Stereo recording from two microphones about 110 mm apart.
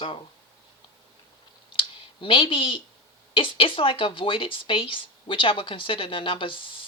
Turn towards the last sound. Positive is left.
turn(degrees=50)  # may be behind; listen again after turning